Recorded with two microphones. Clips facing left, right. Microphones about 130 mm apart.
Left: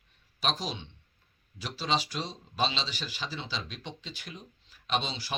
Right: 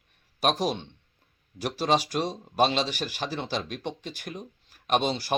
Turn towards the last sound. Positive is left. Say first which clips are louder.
# right 7 dB
turn(degrees=-50)  # may be behind; listen again after turning